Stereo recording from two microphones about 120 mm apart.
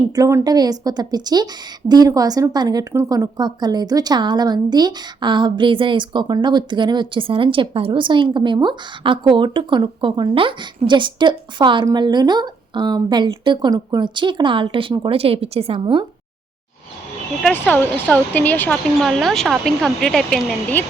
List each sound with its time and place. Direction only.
0.2 s a woman's voice: 25° right (ahead or behind); by 16.0 s 45° right (ahead or behind)
17.5 s speech: 15° left (ahead or behind)
18.9 s speech: centre (ahead or behind)